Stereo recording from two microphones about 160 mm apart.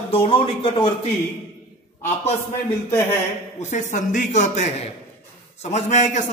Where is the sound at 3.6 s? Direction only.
50° left (ahead or behind).